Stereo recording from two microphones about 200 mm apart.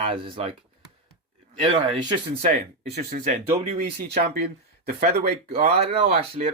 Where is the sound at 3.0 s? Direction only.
45° right (ahead or behind).